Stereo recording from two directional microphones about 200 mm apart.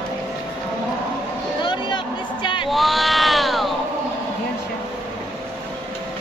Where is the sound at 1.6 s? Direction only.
20° left (ahead or behind).